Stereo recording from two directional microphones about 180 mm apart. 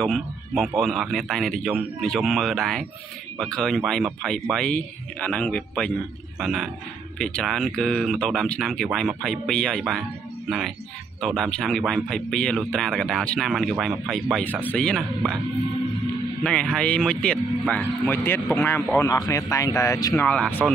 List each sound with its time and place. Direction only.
0.0 s speech: centre (ahead or behind)
11.1 s speech: centre (ahead or behind)
16.4 s speech: 5° left (ahead or behind)
20.6 s speech: centre (ahead or behind)